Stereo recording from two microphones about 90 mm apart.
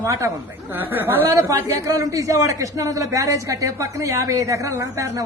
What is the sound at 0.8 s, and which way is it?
Speech, 25° right (ahead or behind).